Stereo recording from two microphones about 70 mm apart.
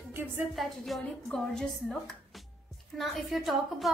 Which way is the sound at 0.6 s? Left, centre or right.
Centre.